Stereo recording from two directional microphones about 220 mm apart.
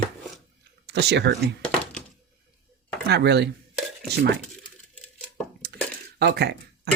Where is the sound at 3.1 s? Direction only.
50° right (ahead or behind).